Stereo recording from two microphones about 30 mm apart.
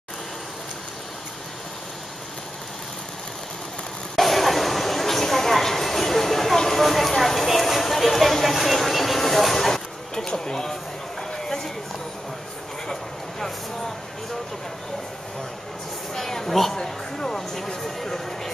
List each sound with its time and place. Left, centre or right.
4.2 s a sound: centre
6.6 s clip-clop: centre
10.1 s speech: left
11.4 s run: centre
13.4 s speech: centre
16.2 s speech: centre